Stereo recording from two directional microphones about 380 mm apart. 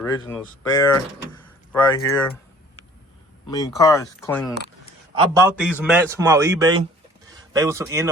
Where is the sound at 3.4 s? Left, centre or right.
Centre.